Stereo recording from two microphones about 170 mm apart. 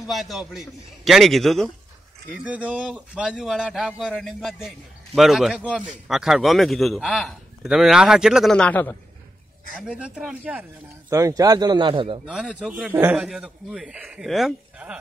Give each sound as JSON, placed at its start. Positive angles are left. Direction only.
{"t": 0.0, "sound": "a man's voice", "side_deg": 0}
{"t": 9.8, "sound": "speech", "side_deg": -5}
{"t": 11.1, "sound": "a man's voice", "side_deg": -20}
{"t": 12.5, "sound": "a man's voice", "side_deg": -5}